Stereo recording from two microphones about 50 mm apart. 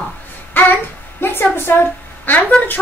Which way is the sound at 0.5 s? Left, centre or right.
Left.